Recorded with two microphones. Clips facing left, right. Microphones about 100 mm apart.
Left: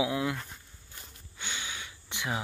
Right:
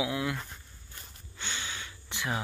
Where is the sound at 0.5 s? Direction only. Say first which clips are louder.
Right 1 dB; 10° left (ahead or behind).